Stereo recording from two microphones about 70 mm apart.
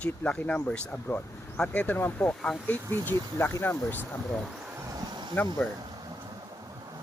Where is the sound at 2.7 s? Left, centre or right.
Left.